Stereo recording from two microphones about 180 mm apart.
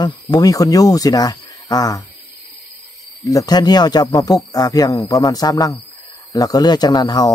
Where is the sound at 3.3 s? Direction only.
20° left (ahead or behind).